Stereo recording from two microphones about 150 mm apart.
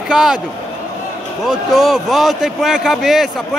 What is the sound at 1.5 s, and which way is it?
A man's voice, centre (ahead or behind).